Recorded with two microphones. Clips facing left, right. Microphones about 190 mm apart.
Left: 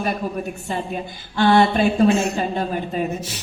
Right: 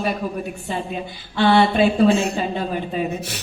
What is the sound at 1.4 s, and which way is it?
Speech, 45° left (ahead or behind).